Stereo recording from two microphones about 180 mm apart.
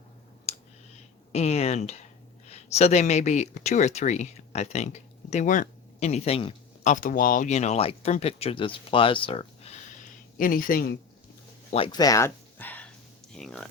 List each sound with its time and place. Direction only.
0.5 s clicking: 35° left (ahead or behind)
1.3 s speech: 35° left (ahead or behind)
6.9 s speech: 45° left (ahead or behind)
10.3 s speech: 50° left (ahead or behind)
11.7 s speech: 25° left (ahead or behind); by 13.7 s centre (ahead or behind)